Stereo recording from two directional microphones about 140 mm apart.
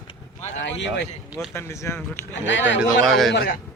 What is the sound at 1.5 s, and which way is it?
Speech, 20° left (ahead or behind).